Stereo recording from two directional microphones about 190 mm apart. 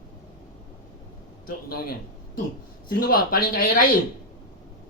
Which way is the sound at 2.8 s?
50° left (ahead or behind).